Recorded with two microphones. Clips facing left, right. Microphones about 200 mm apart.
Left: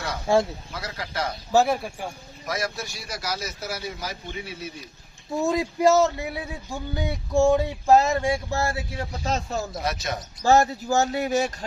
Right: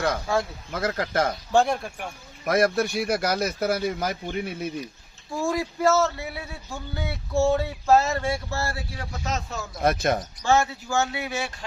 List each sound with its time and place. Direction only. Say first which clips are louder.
0.3 s speech: left 7 dB; 25° left (ahead or behind)
0.7 s speech: right 8 dB; 50° right (ahead or behind)
1.5 s speech: left 1 dB; 5° left (ahead or behind)
2.4 s speech: right 9 dB; 55° right (ahead or behind)
5.3 s a man's voice: left 2 dB; 20° left (ahead or behind)
9.8 s speech: right 6 dB; 55° right (ahead or behind)
10.4 s speech: left 4 dB; 40° left (ahead or behind)